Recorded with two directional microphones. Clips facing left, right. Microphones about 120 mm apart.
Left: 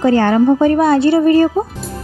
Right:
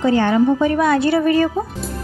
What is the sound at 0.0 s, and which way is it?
A woman's voice, 45° left (ahead or behind).